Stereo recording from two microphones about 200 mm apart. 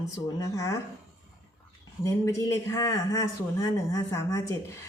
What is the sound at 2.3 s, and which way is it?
A woman's voice, 15° left (ahead or behind).